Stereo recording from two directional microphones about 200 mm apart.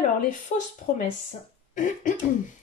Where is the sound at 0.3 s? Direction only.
40° left (ahead or behind).